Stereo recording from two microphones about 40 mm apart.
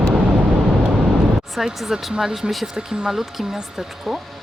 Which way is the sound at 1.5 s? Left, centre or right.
Centre.